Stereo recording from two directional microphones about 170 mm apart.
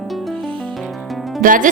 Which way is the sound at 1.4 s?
50° right (ahead or behind).